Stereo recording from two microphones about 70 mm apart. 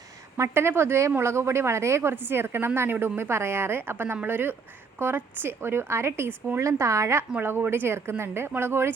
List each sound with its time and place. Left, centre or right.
0.3 s a woman's voice: right
6.6 s a woman's voice: right
7.3 s a woman's voice: right